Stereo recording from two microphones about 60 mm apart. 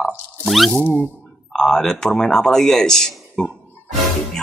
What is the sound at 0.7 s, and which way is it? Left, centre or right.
Speech, left.